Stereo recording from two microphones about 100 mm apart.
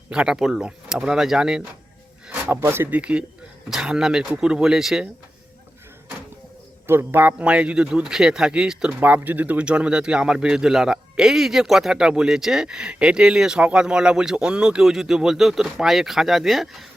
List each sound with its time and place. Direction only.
0.1 s a man's voice: 10° right (ahead or behind)
2.6 s speech: 25° right (ahead or behind); by 5.0 s 5° right (ahead or behind)
6.8 s a man's voice: 25° right (ahead or behind); by 16.6 s centre (ahead or behind)